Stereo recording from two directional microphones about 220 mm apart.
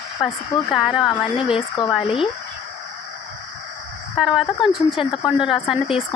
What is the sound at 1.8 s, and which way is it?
Speech, 20° left (ahead or behind).